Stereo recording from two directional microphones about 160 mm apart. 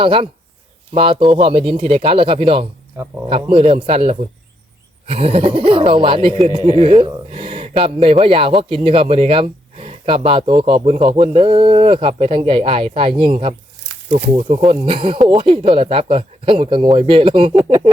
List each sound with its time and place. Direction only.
0.0 s speech: 35° right (ahead or behind)